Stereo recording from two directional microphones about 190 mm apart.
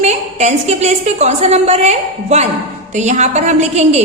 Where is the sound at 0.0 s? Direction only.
35° right (ahead or behind).